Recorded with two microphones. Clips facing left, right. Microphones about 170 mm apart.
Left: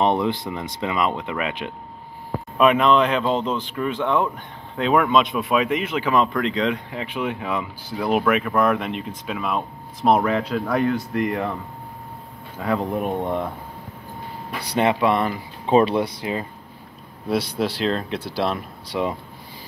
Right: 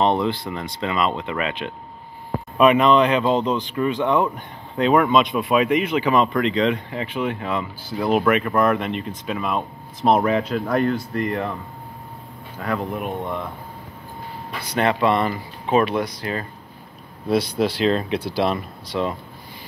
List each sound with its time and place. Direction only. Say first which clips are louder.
0.2 s a man's voice: even; 15° left (ahead or behind)
11.0 s speech: left 1 dB; 15° left (ahead or behind)
12.5 s speech: left 2 dB; 10° left (ahead or behind)
13.2 s speech: left 3 dB; 25° left (ahead or behind)
14.8 s speech: even; 10° left (ahead or behind)
15.6 s speech: left 2 dB; 30° left (ahead or behind)
17.3 s a man's voice: right 3 dB; 5° left (ahead or behind)